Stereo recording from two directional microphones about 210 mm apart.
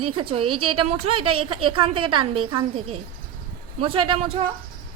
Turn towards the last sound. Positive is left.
turn(degrees=-25)  # may be behind; listen again after turning